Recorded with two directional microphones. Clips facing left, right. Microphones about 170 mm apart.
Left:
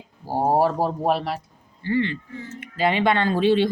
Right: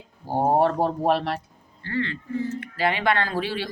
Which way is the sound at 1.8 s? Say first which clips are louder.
Left 5 dB; 15° left (ahead or behind).